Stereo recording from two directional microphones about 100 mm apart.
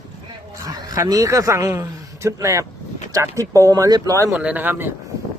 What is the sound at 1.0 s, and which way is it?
A man's voice, 35° right (ahead or behind).